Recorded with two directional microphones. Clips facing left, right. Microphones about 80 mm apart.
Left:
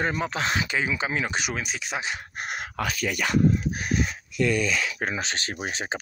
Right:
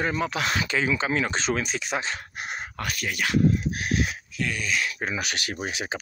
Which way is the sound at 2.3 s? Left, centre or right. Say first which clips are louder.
Left 1 dB; left.